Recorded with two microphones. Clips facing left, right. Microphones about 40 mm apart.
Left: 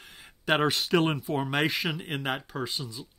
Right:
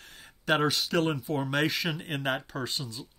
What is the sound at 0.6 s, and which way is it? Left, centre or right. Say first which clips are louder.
Speech: left 4 dB; left.